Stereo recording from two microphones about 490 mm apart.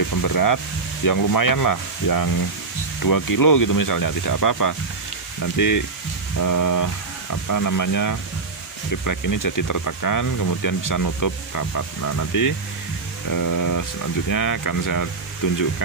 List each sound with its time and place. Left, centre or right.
0.1 s rub: left
1.0 s speech: left